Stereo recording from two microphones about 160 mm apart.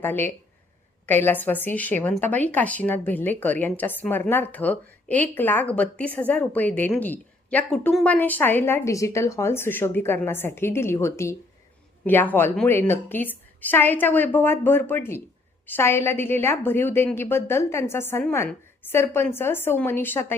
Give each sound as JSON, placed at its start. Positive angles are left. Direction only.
{"t": 0.0, "sound": "a woman's voice", "side_deg": 10}